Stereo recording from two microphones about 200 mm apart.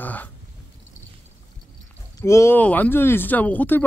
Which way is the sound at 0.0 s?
10° left (ahead or behind).